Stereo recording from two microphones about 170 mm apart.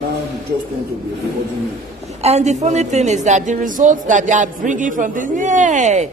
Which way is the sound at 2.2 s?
40° right (ahead or behind).